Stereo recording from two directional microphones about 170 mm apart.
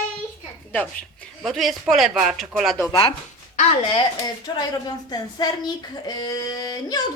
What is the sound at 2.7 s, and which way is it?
Speech, 20° left (ahead or behind).